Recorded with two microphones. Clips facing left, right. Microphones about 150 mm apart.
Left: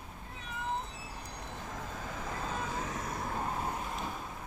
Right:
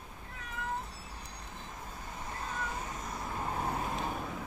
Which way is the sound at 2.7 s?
90° left.